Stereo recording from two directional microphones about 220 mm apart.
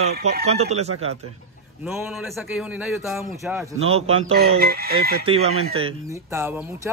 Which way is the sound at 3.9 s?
25° right (ahead or behind).